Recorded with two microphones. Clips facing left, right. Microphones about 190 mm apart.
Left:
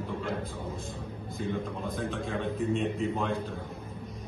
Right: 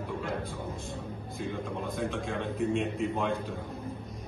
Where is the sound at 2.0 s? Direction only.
Centre (ahead or behind).